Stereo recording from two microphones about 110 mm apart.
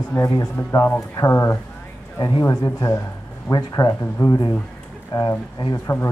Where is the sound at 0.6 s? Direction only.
20° left (ahead or behind).